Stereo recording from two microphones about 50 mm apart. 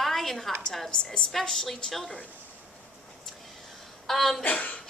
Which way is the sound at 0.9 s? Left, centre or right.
Centre.